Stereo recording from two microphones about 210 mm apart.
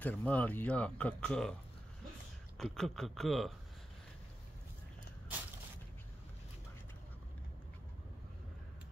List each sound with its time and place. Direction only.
0.0 s speech: 5° left (ahead or behind)
2.5 s speech: centre (ahead or behind)